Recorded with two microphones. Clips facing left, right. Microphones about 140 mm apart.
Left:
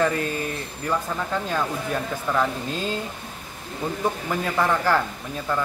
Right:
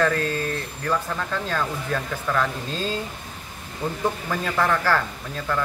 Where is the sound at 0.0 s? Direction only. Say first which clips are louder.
Right 1 dB; 15° left (ahead or behind).